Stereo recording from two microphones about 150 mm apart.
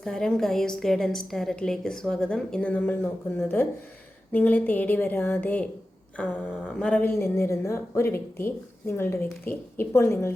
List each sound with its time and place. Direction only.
0.0 s a woman's voice: 5° left (ahead or behind)